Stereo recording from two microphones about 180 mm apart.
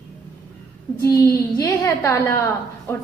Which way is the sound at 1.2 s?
20° left (ahead or behind).